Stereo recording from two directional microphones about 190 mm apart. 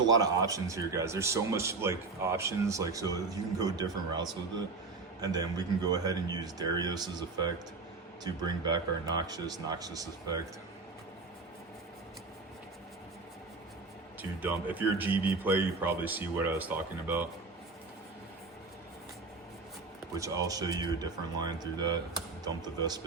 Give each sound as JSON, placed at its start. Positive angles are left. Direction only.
{"t": 0.1, "sound": "speech", "side_deg": -20}
{"t": 14.2, "sound": "speech", "side_deg": -10}
{"t": 20.1, "sound": "speech", "side_deg": -15}